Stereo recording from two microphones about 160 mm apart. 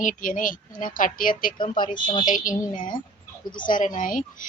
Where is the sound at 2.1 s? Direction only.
55° left (ahead or behind).